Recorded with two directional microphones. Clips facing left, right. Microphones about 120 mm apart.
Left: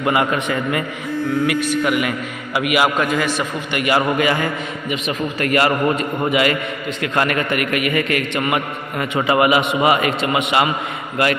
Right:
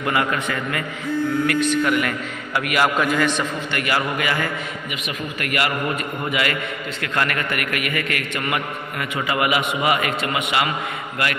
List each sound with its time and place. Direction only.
0.0 s a man's voice: 20° left (ahead or behind)
1.5 s a man's voice: 10° left (ahead or behind)
3.7 s a man's voice: 20° left (ahead or behind)